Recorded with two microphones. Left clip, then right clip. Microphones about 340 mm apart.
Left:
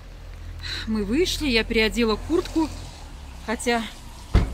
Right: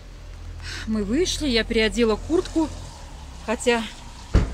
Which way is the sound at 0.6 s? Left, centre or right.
Centre.